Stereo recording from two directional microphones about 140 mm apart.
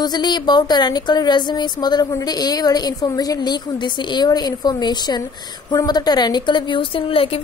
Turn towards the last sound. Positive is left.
turn(degrees=40)  # may be behind; listen again after turning